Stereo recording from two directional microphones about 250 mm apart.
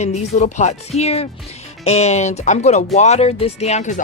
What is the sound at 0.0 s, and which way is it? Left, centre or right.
Speech, left.